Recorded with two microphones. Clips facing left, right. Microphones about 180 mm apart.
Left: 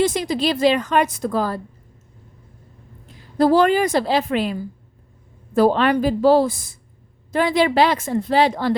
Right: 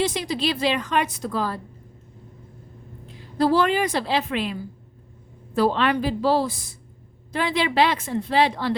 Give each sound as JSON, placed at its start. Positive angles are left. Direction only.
{"t": 0.0, "sound": "a woman's voice", "side_deg": 45}
{"t": 3.3, "sound": "a woman's voice", "side_deg": 45}
{"t": 5.5, "sound": "a woman's voice", "side_deg": 45}